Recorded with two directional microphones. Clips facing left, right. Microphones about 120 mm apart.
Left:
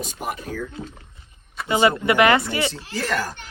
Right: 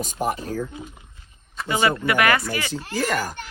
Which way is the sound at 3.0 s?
10° right (ahead or behind).